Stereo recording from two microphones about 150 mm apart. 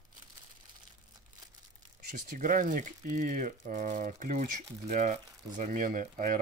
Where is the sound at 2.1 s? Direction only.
60° right (ahead or behind).